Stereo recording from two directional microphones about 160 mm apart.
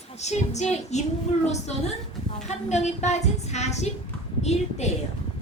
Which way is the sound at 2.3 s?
45° left (ahead or behind).